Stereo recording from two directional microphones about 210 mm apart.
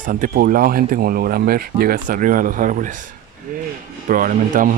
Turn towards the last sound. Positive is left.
turn(degrees=-40)  # may be behind; listen again after turning